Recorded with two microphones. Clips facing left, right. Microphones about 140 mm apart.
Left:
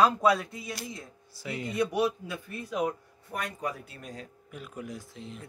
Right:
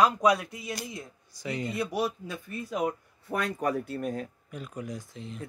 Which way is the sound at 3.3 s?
70° right (ahead or behind).